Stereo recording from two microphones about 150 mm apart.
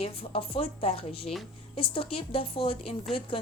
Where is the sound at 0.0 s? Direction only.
40° left (ahead or behind).